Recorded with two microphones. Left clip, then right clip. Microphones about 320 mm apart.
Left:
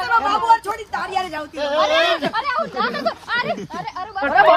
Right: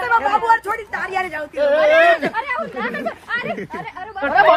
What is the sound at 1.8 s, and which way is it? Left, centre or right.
A man's voice, left.